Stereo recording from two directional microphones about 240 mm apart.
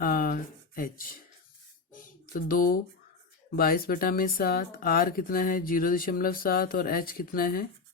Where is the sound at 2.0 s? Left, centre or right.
Left.